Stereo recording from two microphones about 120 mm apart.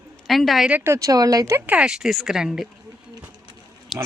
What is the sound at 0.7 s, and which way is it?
Speech, 20° right (ahead or behind).